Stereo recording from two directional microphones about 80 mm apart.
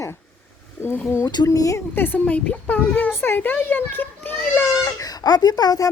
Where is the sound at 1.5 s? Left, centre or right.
Left.